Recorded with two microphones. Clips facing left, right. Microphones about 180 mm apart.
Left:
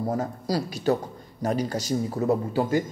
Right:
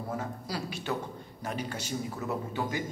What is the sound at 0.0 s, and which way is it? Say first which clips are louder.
A man's voice: left 8 dB; 40° left (ahead or behind).